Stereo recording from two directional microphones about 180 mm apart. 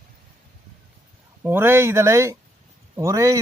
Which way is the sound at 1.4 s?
10° right (ahead or behind).